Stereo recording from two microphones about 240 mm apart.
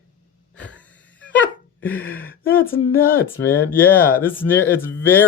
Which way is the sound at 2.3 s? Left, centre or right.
Left.